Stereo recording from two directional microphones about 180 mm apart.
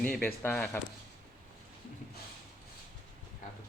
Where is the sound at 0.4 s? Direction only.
10° left (ahead or behind).